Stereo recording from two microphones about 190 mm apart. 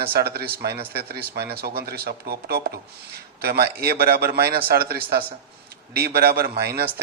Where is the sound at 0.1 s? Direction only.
55° right (ahead or behind).